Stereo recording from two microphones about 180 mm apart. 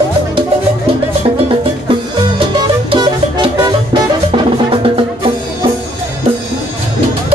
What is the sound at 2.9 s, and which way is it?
Music, 25° right (ahead or behind).